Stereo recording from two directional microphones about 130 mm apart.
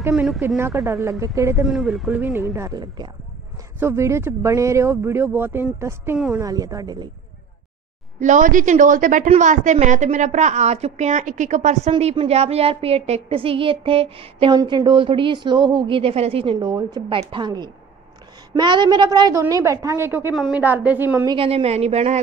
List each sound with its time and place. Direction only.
0.1 s speech: 5° right (ahead or behind)
0.6 s speech: 20° right (ahead or behind)
1.6 s speech: 5° right (ahead or behind)
2.2 s speech: 20° right (ahead or behind)
3.8 s speech: 20° right (ahead or behind)
6.1 s speech: 5° right (ahead or behind)
6.4 s speech: 25° right (ahead or behind)
8.2 s a woman's voice: 75° right (ahead or behind)
9.3 s a woman's voice: 70° right (ahead or behind)
12.2 s speech: 50° right (ahead or behind)
14.6 s a woman's voice: 30° right (ahead or behind); by 16.5 s 50° right (ahead or behind)
16.5 s a woman's voice: 30° right (ahead or behind); by 21.3 s 15° right (ahead or behind)
21.3 s speech: 45° right (ahead or behind)